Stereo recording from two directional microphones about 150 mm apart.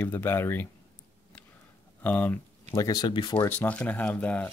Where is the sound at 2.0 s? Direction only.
10° left (ahead or behind); by 3.5 s 30° left (ahead or behind).